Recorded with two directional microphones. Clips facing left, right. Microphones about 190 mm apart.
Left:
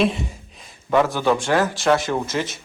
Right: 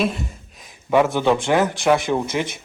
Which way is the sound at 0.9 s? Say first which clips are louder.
Right 1 dB; 15° right (ahead or behind).